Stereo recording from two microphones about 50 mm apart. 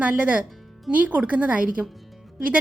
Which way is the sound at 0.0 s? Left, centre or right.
Right.